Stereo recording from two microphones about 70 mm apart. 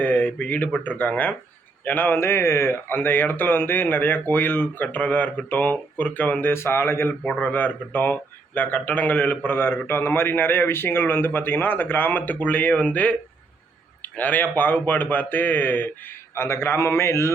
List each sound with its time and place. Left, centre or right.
0.0 s speech: left
6.5 s a man's voice: left